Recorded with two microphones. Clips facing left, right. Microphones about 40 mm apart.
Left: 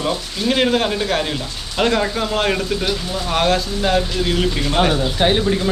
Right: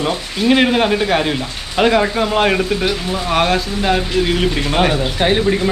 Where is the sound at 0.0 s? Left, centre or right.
Centre.